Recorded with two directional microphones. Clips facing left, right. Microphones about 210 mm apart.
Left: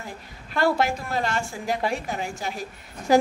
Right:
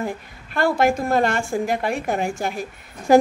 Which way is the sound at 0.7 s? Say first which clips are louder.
Right 7 dB; 50° right (ahead or behind).